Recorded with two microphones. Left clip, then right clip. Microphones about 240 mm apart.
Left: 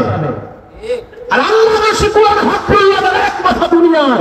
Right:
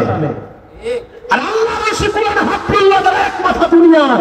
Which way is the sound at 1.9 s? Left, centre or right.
Right.